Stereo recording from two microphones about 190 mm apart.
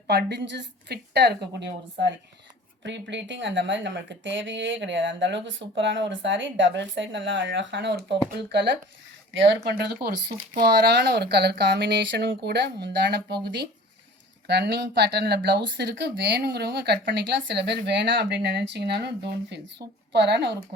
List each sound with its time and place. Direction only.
0.1 s speech: 60° right (ahead or behind)